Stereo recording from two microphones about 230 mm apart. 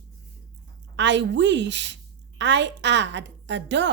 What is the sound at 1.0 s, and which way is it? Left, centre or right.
A woman's voice, right.